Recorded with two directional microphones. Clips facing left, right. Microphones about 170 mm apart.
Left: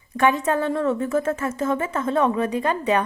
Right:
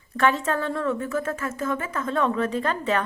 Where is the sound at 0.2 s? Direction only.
15° left (ahead or behind).